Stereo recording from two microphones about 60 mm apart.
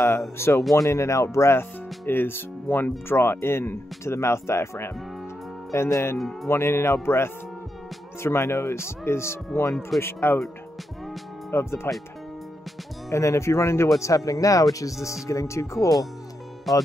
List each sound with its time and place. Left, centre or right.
0.4 s speech: left
6.1 s speech: centre
6.5 s speech: left
11.5 s speech: left
13.1 s speech: left
13.9 s speech: left
15.2 s speech: left
16.7 s speech: centre